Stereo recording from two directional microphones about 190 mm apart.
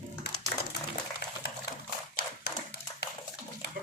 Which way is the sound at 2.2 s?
55° left (ahead or behind).